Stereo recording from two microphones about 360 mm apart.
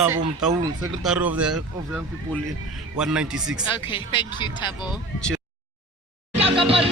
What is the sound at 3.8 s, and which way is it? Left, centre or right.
Speech, centre.